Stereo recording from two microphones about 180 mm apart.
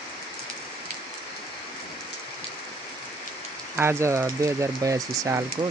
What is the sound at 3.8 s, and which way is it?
Speech, 15° right (ahead or behind).